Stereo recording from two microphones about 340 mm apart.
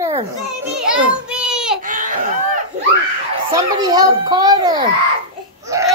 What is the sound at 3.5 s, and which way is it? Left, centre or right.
Speech, centre.